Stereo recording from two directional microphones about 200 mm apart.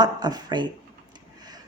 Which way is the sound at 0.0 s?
20° right (ahead or behind).